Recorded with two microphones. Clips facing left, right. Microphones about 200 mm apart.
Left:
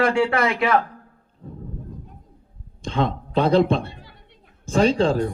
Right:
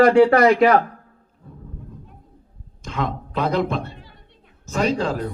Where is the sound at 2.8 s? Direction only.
30° left (ahead or behind).